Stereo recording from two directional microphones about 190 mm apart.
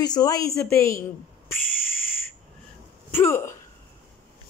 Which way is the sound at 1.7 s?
50° left (ahead or behind).